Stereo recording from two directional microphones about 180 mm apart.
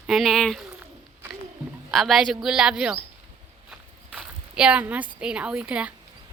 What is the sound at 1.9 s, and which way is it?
Speech, centre (ahead or behind).